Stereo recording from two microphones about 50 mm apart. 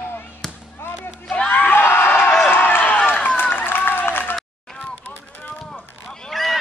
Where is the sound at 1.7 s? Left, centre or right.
Left.